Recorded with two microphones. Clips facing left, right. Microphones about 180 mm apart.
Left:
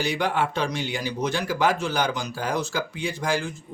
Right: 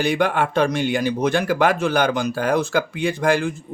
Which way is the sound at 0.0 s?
55° right (ahead or behind).